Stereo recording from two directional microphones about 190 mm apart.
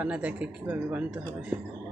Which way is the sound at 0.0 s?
5° right (ahead or behind).